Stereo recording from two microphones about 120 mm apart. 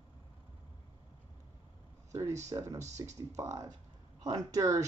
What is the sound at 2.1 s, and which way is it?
Speech, 25° right (ahead or behind).